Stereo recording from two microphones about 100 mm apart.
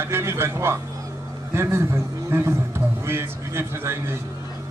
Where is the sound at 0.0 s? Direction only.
25° right (ahead or behind).